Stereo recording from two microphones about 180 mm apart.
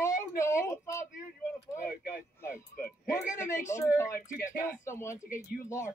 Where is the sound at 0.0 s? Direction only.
15° left (ahead or behind).